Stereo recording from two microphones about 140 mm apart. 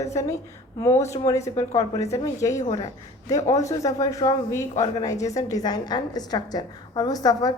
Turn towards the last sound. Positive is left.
turn(degrees=30)  # may be behind; listen again after turning